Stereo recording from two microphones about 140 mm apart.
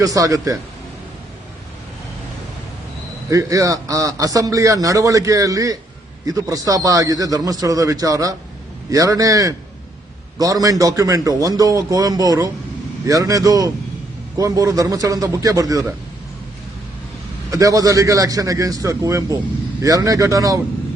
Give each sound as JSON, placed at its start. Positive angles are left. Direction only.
{"t": 0.0, "sound": "a man's voice", "side_deg": -25}
{"t": 3.2, "sound": "a man's voice", "side_deg": -25}
{"t": 17.5, "sound": "a man's voice", "side_deg": -25}